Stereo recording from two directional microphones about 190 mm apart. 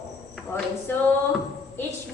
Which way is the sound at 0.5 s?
10° left (ahead or behind).